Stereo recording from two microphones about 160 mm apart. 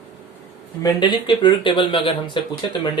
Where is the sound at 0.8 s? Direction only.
30° left (ahead or behind).